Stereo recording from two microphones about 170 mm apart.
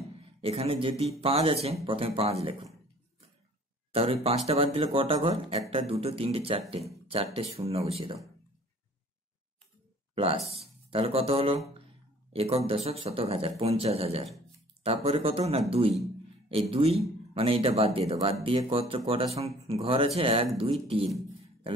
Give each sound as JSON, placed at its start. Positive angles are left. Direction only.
{"t": 0.2, "sound": "speech", "side_deg": -35}
{"t": 3.9, "sound": "speech", "side_deg": -35}
{"t": 10.1, "sound": "speech", "side_deg": -35}